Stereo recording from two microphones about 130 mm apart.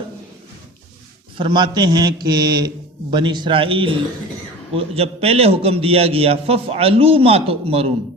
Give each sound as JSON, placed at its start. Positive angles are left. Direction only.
{"t": 1.4, "sound": "a man's voice", "side_deg": -35}